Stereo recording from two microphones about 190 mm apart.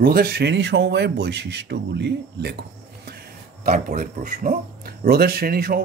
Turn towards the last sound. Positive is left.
turn(degrees=-50)  # may be behind; listen again after turning